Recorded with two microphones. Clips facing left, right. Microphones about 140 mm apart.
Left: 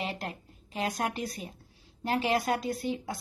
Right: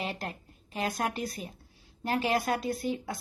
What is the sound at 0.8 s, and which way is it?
A woman's voice, 25° left (ahead or behind).